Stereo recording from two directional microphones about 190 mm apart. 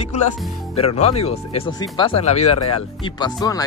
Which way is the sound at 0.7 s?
35° left (ahead or behind).